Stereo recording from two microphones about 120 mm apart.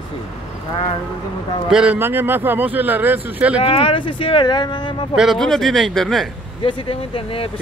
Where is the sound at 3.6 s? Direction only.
55° left (ahead or behind).